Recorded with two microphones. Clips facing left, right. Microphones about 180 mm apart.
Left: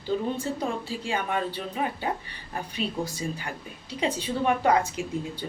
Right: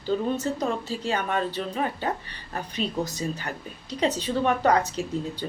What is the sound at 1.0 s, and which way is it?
Speech, 10° left (ahead or behind).